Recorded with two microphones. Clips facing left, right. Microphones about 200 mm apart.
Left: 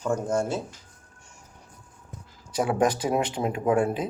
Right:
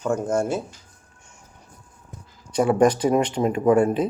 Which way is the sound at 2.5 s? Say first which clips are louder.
Right 6 dB; 5° left (ahead or behind).